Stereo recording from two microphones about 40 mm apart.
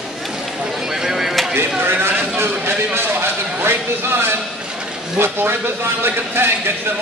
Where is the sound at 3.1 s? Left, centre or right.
Right.